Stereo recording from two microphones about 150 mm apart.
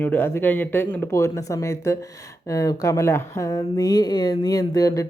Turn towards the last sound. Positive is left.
turn(degrees=25)  # may be behind; listen again after turning